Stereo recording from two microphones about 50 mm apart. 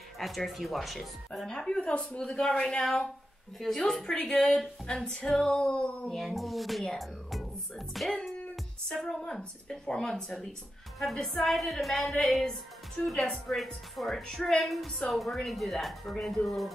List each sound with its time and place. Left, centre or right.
0.2 s a woman's voice: centre
1.6 s a woman's voice: centre
4.9 s female singing: centre
6.1 s a woman's voice: centre
9.0 s a woman's voice: centre
11.1 s a woman's voice: centre
14.2 s a woman's voice: centre